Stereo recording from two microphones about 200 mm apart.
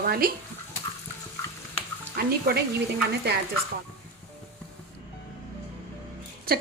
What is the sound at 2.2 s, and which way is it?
Speech, 50° right (ahead or behind).